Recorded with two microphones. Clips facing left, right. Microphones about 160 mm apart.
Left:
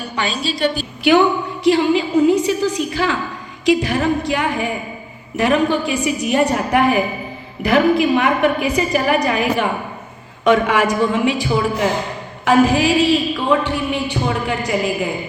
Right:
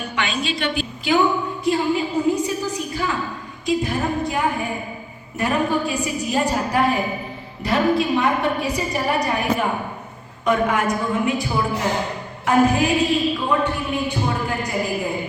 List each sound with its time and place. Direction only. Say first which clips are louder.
0.0 s a woman's voice: left 2 dB; 35° left (ahead or behind)
1.1 s speech: left 7 dB; 70° left (ahead or behind)
1.6 s a woman's voice: left 6 dB; 85° left